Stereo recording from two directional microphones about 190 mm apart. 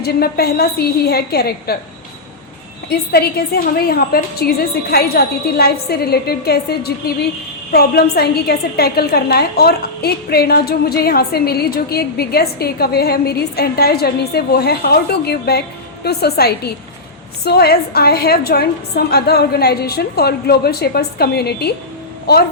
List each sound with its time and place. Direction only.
0.0 s a woman's voice: 55° left (ahead or behind)
2.9 s a woman's voice: 55° left (ahead or behind)